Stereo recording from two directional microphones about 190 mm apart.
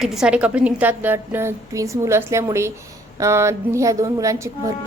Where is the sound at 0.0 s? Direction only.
5° right (ahead or behind).